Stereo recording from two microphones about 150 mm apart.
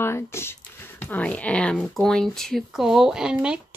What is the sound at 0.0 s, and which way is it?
Speech, 15° left (ahead or behind).